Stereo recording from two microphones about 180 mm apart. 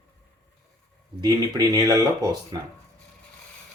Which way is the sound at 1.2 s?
20° right (ahead or behind).